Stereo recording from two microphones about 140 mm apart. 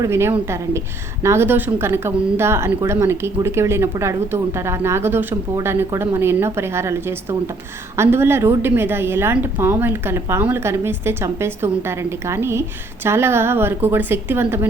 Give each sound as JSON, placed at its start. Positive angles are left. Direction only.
{"t": 0.0, "sound": "a woman's voice", "side_deg": -20}